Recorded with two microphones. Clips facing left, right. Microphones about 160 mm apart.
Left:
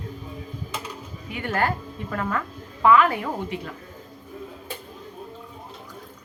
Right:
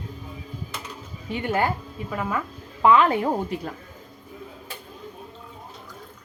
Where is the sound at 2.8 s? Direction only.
25° right (ahead or behind).